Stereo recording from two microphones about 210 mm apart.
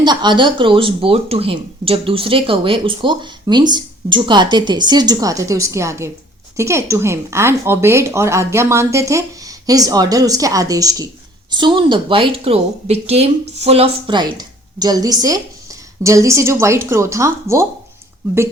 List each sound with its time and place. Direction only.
0.0 s speech: 20° right (ahead or behind)